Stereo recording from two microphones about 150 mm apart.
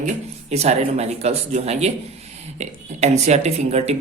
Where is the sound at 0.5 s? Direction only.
45° right (ahead or behind).